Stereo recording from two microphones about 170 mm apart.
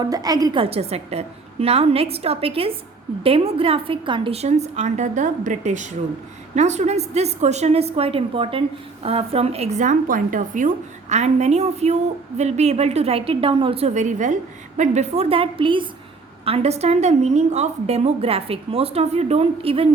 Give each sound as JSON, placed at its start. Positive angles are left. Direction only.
{"t": 0.0, "sound": "a woman's voice", "side_deg": -25}